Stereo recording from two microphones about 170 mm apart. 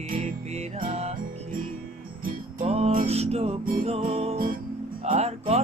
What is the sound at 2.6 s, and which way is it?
Music, 35° right (ahead or behind).